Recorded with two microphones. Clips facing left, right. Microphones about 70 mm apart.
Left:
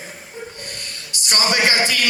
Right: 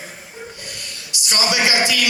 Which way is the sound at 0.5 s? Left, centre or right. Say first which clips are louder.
Left 1 dB; left.